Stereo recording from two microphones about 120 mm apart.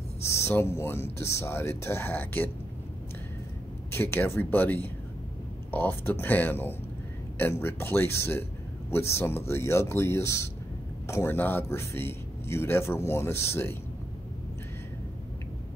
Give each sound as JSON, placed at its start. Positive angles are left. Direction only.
{"t": 0.2, "sound": "a man's voice", "side_deg": 25}
{"t": 3.9, "sound": "a man's voice", "side_deg": 20}